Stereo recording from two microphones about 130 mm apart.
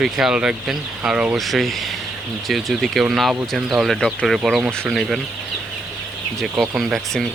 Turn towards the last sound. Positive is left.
turn(degrees=5)  # may be behind; listen again after turning